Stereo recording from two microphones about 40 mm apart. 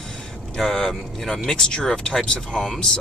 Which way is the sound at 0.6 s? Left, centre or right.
Centre.